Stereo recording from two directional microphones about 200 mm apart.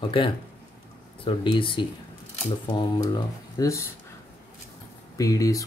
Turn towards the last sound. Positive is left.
turn(degrees=15)  # may be behind; listen again after turning